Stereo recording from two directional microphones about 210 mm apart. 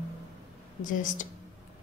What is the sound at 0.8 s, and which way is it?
Speech, 40° left (ahead or behind).